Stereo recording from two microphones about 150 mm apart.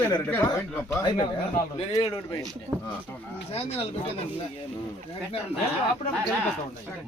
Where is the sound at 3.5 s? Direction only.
40° left (ahead or behind).